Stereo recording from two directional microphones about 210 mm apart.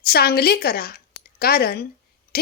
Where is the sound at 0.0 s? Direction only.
45° left (ahead or behind).